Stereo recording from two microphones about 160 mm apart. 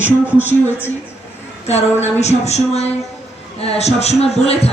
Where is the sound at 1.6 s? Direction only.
45° left (ahead or behind).